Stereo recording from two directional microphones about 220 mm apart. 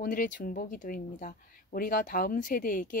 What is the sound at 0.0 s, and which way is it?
Speech, 35° left (ahead or behind).